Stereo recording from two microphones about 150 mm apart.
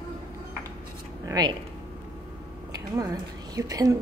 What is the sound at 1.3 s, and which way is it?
Speech, 30° right (ahead or behind).